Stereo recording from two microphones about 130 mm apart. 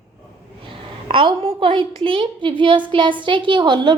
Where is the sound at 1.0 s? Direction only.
45° right (ahead or behind).